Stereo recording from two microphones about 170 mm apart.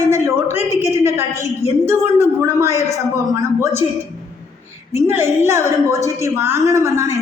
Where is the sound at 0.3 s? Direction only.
15° right (ahead or behind).